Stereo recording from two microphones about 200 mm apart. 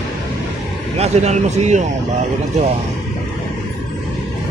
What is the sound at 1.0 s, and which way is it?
Speech, 35° right (ahead or behind).